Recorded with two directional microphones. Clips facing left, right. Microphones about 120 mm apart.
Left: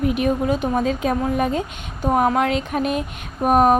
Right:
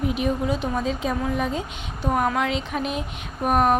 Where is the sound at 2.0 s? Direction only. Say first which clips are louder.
Left 5 dB; 40° left (ahead or behind).